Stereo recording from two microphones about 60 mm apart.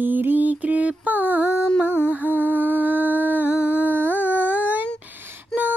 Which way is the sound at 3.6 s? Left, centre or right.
Right.